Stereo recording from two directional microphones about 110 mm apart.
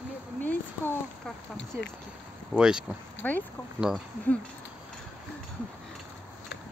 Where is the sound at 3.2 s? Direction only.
15° left (ahead or behind).